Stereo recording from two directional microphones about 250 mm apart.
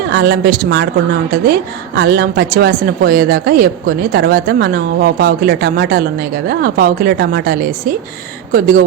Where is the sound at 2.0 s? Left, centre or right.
Right.